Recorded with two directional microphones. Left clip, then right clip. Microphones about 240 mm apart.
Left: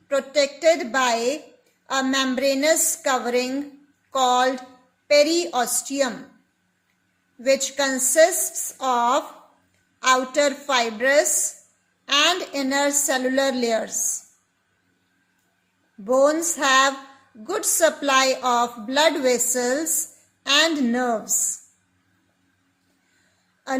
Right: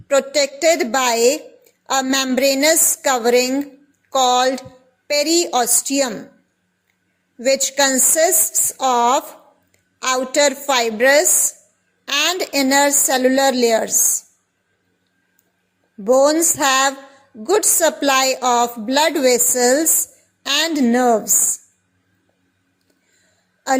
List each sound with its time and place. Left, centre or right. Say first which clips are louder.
0.1 s a woman's voice: right 5 dB; right
7.3 s a woman's voice: right 4 dB; right
16.0 s a woman's voice: right 5 dB; right